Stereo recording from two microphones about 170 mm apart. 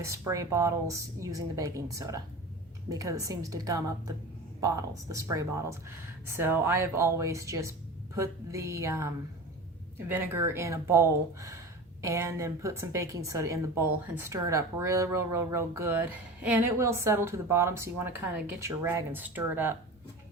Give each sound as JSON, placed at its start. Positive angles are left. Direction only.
{"t": 0.0, "sound": "a woman's voice", "side_deg": -20}